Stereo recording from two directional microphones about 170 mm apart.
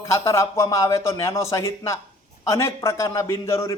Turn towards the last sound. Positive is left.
turn(degrees=20)  # may be behind; listen again after turning